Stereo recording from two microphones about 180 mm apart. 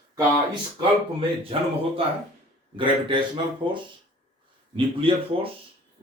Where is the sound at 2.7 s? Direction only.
25° right (ahead or behind).